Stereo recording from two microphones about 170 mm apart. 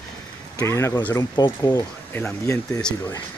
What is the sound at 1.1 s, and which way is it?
Speech, 25° left (ahead or behind).